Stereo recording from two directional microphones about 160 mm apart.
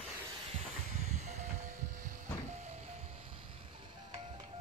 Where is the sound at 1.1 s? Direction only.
45° right (ahead or behind).